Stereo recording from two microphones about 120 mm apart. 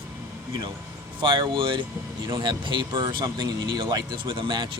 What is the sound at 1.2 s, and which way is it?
Speech, 45° right (ahead or behind).